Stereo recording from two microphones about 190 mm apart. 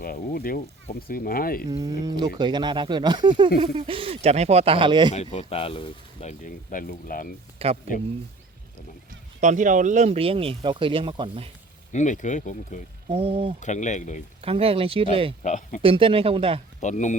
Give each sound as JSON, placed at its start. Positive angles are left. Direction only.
{"t": 0.0, "sound": "speech", "side_deg": 50}
{"t": 1.8, "sound": "speech", "side_deg": -20}
{"t": 5.1, "sound": "speech", "side_deg": 35}
{"t": 7.6, "sound": "speech", "side_deg": -30}
{"t": 9.4, "sound": "speech", "side_deg": -40}
{"t": 11.9, "sound": "speech", "side_deg": 40}
{"t": 13.1, "sound": "speech", "side_deg": -30}
{"t": 13.6, "sound": "speech", "side_deg": 40}
{"t": 14.4, "sound": "speech", "side_deg": -30}
{"t": 15.4, "sound": "speech", "side_deg": 40}
{"t": 15.8, "sound": "speech", "side_deg": -30}
{"t": 16.8, "sound": "speech", "side_deg": 40}